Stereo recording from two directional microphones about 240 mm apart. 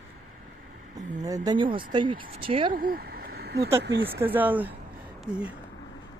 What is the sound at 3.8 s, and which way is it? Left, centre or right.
Speech, right.